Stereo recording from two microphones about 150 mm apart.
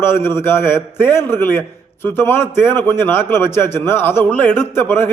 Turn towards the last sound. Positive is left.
turn(degrees=15)  # may be behind; listen again after turning